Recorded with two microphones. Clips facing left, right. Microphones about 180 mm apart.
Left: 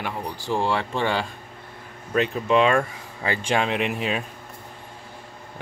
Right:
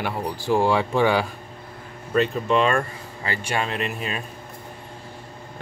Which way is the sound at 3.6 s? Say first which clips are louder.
Left 3 dB; 75° left (ahead or behind).